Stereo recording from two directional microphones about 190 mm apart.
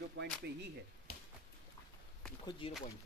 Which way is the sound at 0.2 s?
75° right (ahead or behind).